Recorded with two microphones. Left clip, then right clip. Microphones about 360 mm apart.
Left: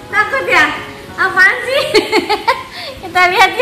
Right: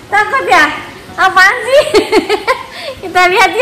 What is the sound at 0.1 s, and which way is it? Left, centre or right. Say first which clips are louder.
A woman's voice: right 3 dB; centre.